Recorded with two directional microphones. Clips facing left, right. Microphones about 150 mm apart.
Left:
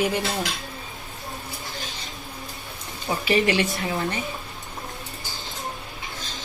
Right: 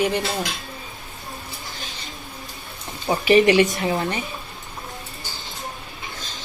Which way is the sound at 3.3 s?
20° right (ahead or behind).